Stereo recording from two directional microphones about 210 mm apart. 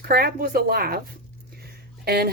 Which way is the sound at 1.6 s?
50° right (ahead or behind).